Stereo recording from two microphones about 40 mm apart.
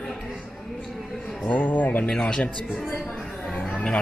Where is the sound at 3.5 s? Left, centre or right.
Left.